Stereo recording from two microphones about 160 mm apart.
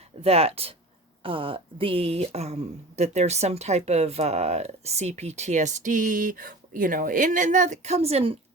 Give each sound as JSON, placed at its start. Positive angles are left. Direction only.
{"t": 0.2, "sound": "speech", "side_deg": -40}